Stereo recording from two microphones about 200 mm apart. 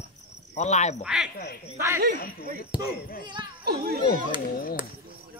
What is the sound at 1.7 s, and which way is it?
Speech, 15° right (ahead or behind).